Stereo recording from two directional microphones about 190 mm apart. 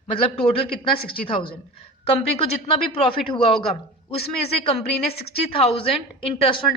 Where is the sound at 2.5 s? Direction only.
30° left (ahead or behind).